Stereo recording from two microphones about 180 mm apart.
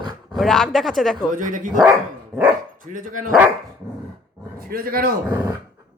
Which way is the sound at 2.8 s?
45° right (ahead or behind).